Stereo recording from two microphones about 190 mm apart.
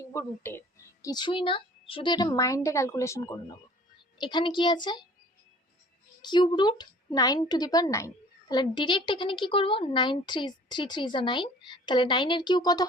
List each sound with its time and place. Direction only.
0.0 s a woman's voice: 15° left (ahead or behind)
6.2 s a woman's voice: 25° left (ahead or behind)